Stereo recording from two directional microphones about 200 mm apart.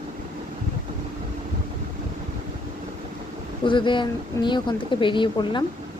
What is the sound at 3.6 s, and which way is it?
Speech, 25° left (ahead or behind).